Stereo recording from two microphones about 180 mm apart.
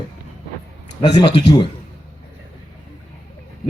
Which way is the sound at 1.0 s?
25° left (ahead or behind).